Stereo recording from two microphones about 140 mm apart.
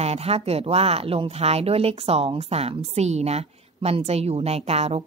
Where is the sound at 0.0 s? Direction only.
45° right (ahead or behind).